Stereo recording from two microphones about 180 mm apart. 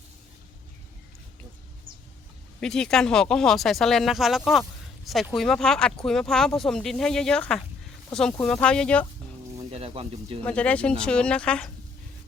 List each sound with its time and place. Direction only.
2.6 s speech: 5° left (ahead or behind)
9.7 s speech: 35° right (ahead or behind)
10.4 s speech: 5° left (ahead or behind)